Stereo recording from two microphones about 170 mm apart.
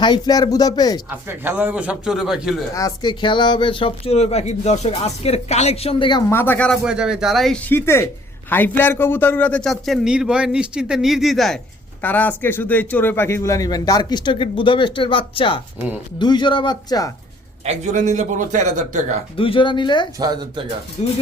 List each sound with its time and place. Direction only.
0.0 s speech: 25° left (ahead or behind)
1.3 s a man's voice: 10° right (ahead or behind)
2.7 s speech: 25° left (ahead or behind)
6.3 s speech: 10° left (ahead or behind)
6.8 s a man's voice: 5° right (ahead or behind); by 17.1 s 25° left (ahead or behind)
17.7 s a man's voice: 45° right (ahead or behind)
19.4 s speech: 30° left (ahead or behind)
20.1 s speech: 25° right (ahead or behind)
21.0 s speech: 40° left (ahead or behind)